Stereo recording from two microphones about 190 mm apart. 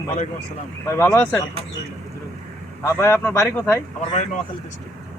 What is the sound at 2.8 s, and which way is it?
Speech, 15° left (ahead or behind).